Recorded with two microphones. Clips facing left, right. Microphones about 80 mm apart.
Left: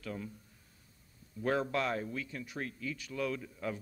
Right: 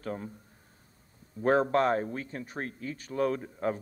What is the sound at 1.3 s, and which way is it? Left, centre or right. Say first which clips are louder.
A man's voice: right 8 dB; right.